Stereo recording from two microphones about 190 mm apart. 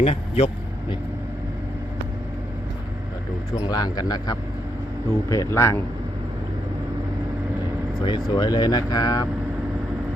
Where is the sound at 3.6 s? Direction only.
20° left (ahead or behind).